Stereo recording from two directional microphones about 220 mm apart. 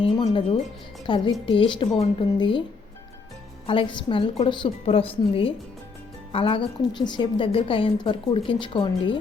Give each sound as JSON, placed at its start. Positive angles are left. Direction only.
{"t": 0.3, "sound": "a woman's voice", "side_deg": 25}
{"t": 3.7, "sound": "a woman's voice", "side_deg": 25}